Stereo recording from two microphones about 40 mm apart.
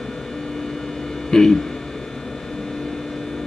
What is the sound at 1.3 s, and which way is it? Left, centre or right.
Speech, centre.